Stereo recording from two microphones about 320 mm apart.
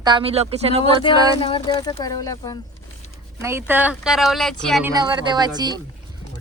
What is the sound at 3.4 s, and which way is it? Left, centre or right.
Speech, centre.